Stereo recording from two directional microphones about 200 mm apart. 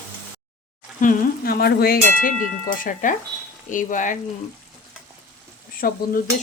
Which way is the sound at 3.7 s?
40° left (ahead or behind).